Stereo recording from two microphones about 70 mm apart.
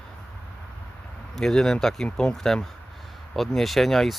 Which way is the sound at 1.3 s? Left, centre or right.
Centre.